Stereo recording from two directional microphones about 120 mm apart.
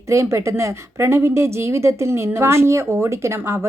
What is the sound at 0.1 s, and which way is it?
Speech, 25° right (ahead or behind).